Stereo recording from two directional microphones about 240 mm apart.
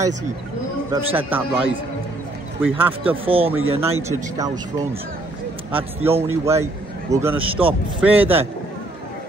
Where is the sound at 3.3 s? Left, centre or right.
Right.